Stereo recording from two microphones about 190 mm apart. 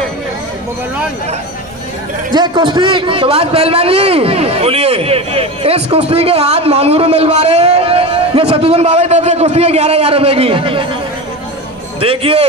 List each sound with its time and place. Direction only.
2.3 s a man's voice: 25° right (ahead or behind)
12.0 s a man's voice: 30° right (ahead or behind)